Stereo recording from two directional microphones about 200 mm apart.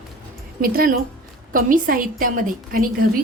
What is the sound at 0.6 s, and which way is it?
A woman's voice, 45° right (ahead or behind).